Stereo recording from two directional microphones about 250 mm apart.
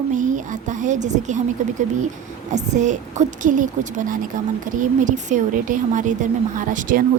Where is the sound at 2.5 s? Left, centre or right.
Right.